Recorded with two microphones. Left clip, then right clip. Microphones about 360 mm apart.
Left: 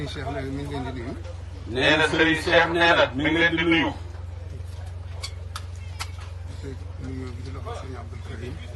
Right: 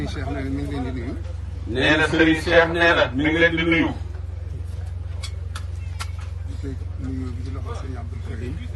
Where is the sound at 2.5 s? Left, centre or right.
Centre.